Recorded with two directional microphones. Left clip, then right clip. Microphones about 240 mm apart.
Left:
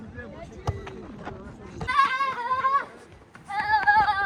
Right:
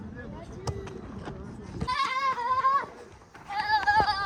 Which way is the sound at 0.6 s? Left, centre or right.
Left.